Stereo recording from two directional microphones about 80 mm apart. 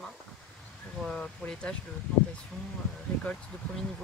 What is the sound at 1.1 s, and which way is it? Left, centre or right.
Speech, centre.